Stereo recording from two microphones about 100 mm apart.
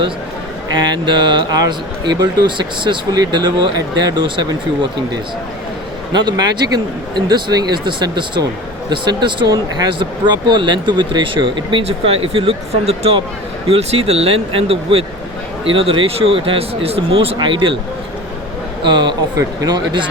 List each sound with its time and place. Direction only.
0.7 s speech: 50° right (ahead or behind)
6.1 s speech: 45° right (ahead or behind)
11.9 s speech: 75° right (ahead or behind)
17.3 s speech: 55° right (ahead or behind)
18.8 s speech: 50° right (ahead or behind)